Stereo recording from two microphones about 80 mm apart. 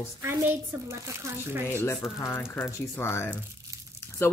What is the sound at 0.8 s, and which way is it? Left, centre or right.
Speech, right.